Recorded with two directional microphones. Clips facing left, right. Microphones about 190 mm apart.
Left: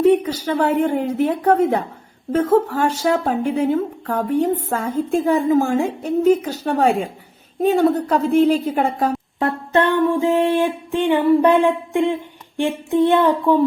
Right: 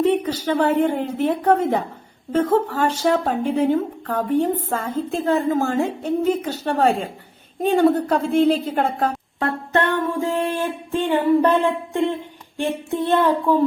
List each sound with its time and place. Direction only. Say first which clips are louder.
0.0 s a sound: left 4 dB; 10° left (ahead or behind)
0.6 s music: left 1 dB; 10° left (ahead or behind)
9.4 s music: left 3 dB; 20° left (ahead or behind)